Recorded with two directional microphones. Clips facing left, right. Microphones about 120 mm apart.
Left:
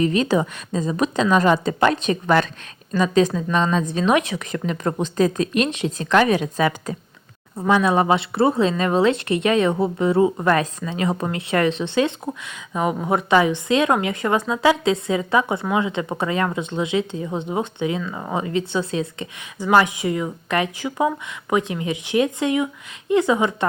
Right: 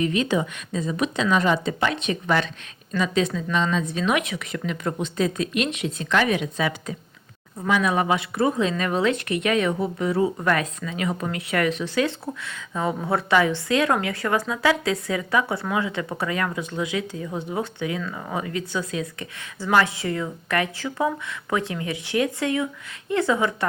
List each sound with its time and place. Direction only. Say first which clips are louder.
0.0 s a woman's voice: left 4 dB; 35° left (ahead or behind)
7.7 s a woman's voice: left 4 dB; 30° left (ahead or behind)
19.5 s a woman's voice: left 4 dB; 15° left (ahead or behind)